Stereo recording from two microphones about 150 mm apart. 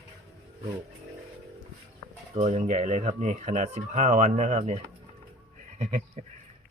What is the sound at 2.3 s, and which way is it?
Speech, 45° right (ahead or behind).